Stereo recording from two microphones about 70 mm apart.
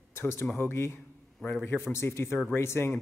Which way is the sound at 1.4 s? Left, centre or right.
Centre.